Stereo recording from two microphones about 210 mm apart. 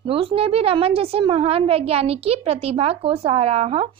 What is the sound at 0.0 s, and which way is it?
A woman's voice, 25° right (ahead or behind).